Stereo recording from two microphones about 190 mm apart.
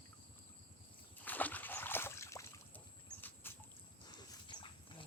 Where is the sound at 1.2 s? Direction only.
10° left (ahead or behind).